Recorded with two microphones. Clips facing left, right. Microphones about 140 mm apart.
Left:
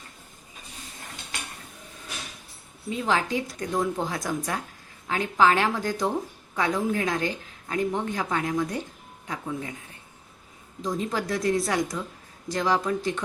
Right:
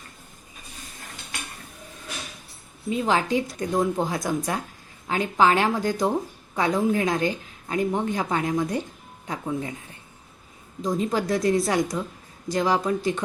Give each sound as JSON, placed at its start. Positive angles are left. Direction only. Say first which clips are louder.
{"t": 3.0, "sound": "a woman's voice", "louder": "right 3 dB", "side_deg": -20}
{"t": 10.9, "sound": "a woman's voice", "louder": "right 4 dB", "side_deg": -25}